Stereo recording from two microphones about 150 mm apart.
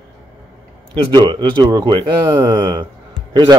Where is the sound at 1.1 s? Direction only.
30° right (ahead or behind).